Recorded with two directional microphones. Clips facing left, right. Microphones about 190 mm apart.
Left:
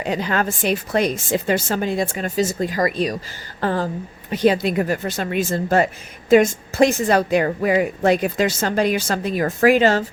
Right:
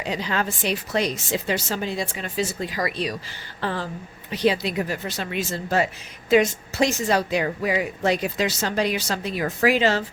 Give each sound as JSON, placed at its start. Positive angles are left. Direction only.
{"t": 0.0, "sound": "a woman's voice", "side_deg": 50}